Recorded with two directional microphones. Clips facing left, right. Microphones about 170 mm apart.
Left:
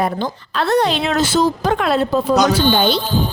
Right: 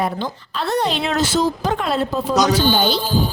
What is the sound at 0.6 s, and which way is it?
A woman's voice, 75° left (ahead or behind).